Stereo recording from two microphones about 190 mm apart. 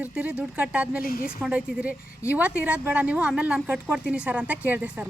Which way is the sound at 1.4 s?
5° right (ahead or behind).